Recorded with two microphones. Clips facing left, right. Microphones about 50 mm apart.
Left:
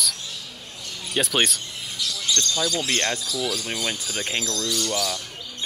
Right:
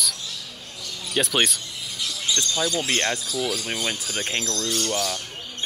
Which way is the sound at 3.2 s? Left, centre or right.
Right.